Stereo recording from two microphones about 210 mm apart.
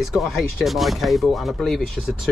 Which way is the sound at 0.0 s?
Centre (ahead or behind).